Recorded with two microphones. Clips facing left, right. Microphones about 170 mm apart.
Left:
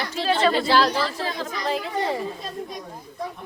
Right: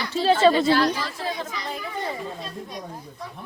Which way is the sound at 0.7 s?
90° left.